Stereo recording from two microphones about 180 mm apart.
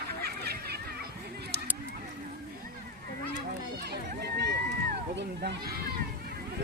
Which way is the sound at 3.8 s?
65° right (ahead or behind).